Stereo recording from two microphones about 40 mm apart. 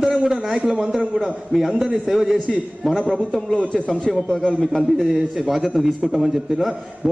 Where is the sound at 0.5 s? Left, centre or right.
Right.